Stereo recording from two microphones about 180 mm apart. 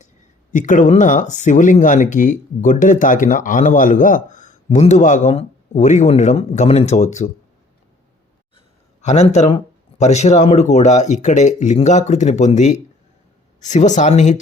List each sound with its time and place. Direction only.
0.5 s speech: 45° left (ahead or behind)
8.5 s a sound: 40° left (ahead or behind)
10.0 s speech: 40° left (ahead or behind)